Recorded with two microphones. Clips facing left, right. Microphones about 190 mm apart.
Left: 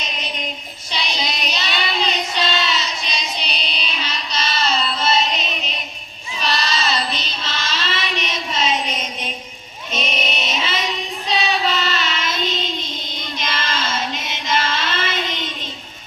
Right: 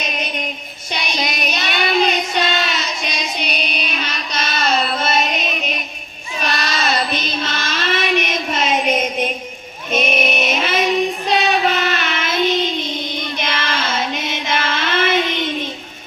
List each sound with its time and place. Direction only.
0.0 s music: 55° right (ahead or behind)
0.9 s child singing: 55° right (ahead or behind)
3.3 s carnatic music: 55° right (ahead or behind)
6.4 s child singing: 55° right (ahead or behind)
12.8 s music: 15° right (ahead or behind)
13.3 s child singing: 60° right (ahead or behind)